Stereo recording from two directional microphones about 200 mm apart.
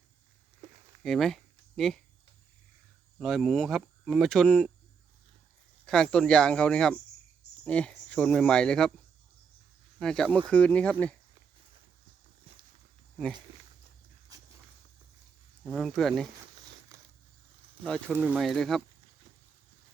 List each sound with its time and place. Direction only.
1.0 s speech: centre (ahead or behind)
3.2 s speech: centre (ahead or behind)
5.8 s speech: 5° left (ahead or behind)
10.0 s speech: 5° left (ahead or behind)
15.6 s speech: centre (ahead or behind)
16.9 s crushing: 15° right (ahead or behind)
18.1 s speech: 10° right (ahead or behind)